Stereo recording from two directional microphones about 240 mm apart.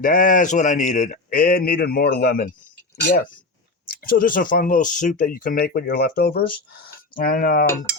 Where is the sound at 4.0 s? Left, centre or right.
Left.